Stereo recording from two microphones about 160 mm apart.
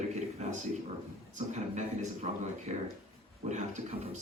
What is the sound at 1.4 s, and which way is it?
A man's voice, 45° right (ahead or behind).